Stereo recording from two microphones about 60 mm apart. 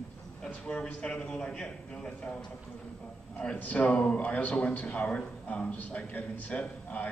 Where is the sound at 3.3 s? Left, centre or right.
Left.